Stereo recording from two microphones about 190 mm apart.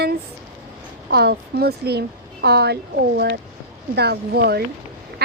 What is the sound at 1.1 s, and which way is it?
A woman's voice, 55° right (ahead or behind).